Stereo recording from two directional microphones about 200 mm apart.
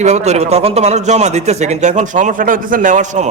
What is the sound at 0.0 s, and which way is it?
Speech, 35° right (ahead or behind).